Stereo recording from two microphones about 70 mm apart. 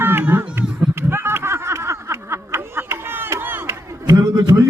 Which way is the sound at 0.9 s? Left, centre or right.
Right.